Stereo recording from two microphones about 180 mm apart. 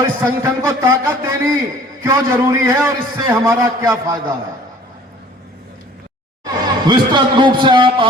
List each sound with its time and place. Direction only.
0.2 s a man's voice: 15° right (ahead or behind)
6.4 s speech: 25° right (ahead or behind)